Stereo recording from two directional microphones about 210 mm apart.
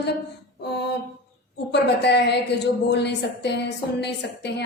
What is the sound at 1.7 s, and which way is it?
A woman's voice, 55° left (ahead or behind).